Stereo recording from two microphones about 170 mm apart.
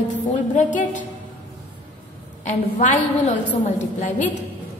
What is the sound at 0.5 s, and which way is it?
Female singing, 45° left (ahead or behind).